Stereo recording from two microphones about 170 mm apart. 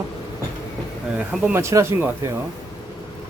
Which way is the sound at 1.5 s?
15° right (ahead or behind).